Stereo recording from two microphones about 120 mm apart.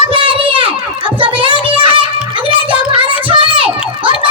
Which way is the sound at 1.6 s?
50° right (ahead or behind).